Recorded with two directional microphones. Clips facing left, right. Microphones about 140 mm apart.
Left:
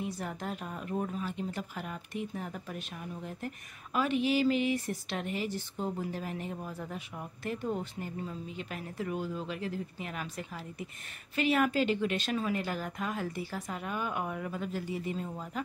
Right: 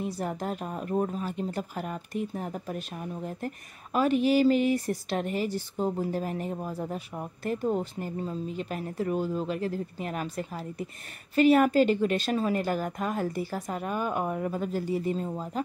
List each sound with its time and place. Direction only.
0.0 s speech: 40° right (ahead or behind)